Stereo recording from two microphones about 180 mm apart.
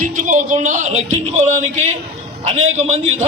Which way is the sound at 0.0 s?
45° right (ahead or behind).